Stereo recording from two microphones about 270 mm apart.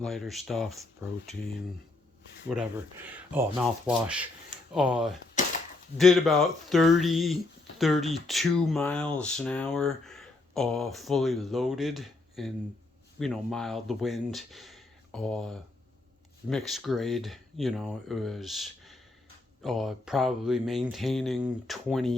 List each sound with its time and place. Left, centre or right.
0.0 s speech: centre
2.5 s speech: centre